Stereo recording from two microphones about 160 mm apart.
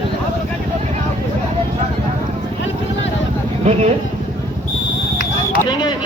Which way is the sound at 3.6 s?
45° right (ahead or behind).